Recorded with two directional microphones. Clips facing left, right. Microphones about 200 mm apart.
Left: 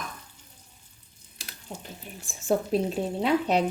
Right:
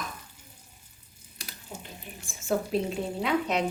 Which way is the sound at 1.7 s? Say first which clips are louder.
Left 2 dB; 35° left (ahead or behind).